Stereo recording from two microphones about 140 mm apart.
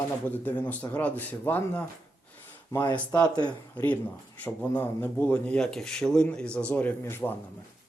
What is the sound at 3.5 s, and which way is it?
Speech, 10° left (ahead or behind).